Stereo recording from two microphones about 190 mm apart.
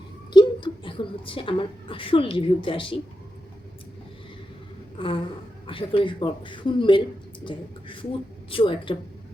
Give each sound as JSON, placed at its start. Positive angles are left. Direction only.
{"t": 0.3, "sound": "a woman's voice", "side_deg": 25}
{"t": 4.9, "sound": "a sound", "side_deg": 25}
{"t": 5.6, "sound": "speech", "side_deg": 25}